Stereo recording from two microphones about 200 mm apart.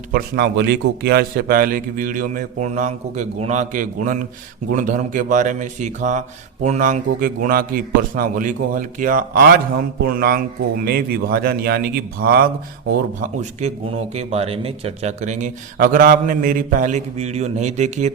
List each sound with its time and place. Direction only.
0.1 s a man's voice: 55° right (ahead or behind)
13.4 s speech: 35° right (ahead or behind)